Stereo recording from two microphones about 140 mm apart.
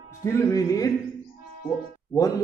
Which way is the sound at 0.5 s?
25° left (ahead or behind).